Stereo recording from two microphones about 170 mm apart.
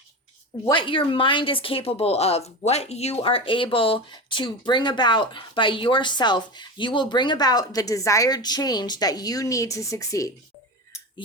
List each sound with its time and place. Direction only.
0.7 s speech: 30° left (ahead or behind)